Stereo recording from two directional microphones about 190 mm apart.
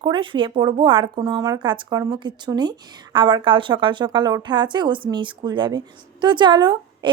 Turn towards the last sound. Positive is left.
turn(degrees=-25)  # may be behind; listen again after turning